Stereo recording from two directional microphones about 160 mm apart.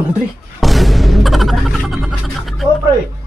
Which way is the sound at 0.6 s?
Centre (ahead or behind).